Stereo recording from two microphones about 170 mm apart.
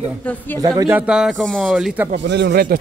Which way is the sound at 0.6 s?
20° right (ahead or behind).